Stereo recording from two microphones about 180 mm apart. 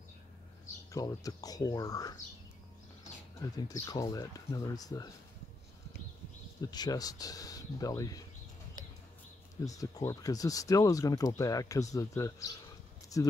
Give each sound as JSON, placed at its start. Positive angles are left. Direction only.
{"t": 0.9, "sound": "speech", "side_deg": 20}
{"t": 3.3, "sound": "speech", "side_deg": 20}
{"t": 6.6, "sound": "speech", "side_deg": 20}
{"t": 9.7, "sound": "speech", "side_deg": 20}